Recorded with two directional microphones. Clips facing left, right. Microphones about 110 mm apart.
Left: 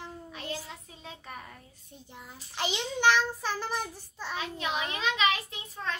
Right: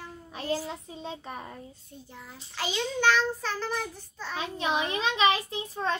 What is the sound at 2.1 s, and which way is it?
Child singing, 20° left (ahead or behind).